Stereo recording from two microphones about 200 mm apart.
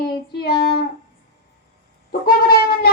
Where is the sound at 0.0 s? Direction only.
50° left (ahead or behind).